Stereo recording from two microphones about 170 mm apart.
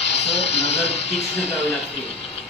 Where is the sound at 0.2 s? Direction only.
90° left.